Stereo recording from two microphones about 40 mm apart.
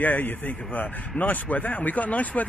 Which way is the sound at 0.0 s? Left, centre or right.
Left.